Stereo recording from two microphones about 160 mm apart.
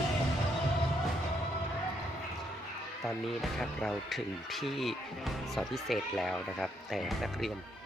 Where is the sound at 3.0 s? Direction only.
Centre (ahead or behind).